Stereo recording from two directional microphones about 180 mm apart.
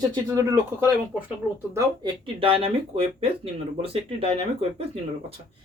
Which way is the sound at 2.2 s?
30° right (ahead or behind).